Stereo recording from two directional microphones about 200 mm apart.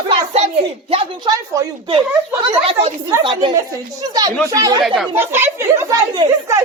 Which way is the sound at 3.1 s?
25° right (ahead or behind).